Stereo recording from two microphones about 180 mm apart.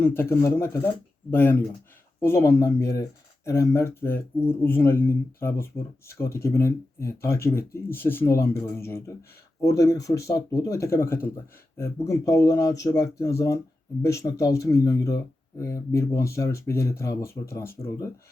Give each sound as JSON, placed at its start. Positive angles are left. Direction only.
{"t": 0.0, "sound": "speech", "side_deg": 10}